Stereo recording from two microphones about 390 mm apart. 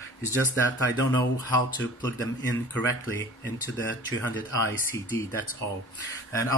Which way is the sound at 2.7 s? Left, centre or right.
Centre.